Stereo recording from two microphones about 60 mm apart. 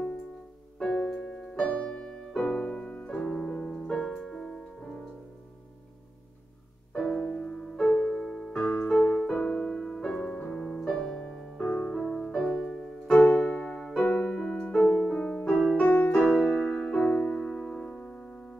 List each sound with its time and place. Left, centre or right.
0.7 s music: centre
6.9 s music: centre
8.9 s music: left
9.2 s music: centre
13.2 s music: left
13.7 s music: centre
14.0 s music: left
14.3 s music: centre
17.7 s music: centre